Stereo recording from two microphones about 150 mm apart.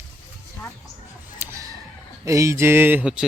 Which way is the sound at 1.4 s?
20° right (ahead or behind).